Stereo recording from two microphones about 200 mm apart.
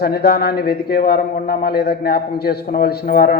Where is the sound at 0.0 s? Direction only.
50° left (ahead or behind).